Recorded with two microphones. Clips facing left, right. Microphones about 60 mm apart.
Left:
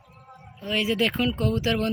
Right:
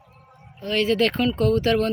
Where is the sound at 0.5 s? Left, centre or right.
Centre.